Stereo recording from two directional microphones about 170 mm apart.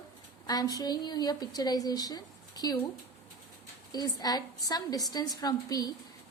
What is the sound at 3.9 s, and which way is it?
A woman's voice, 25° left (ahead or behind).